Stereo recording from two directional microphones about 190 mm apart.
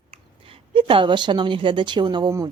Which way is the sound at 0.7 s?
25° right (ahead or behind).